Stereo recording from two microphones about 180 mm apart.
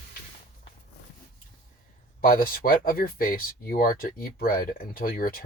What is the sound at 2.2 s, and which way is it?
Speech, 55° left (ahead or behind).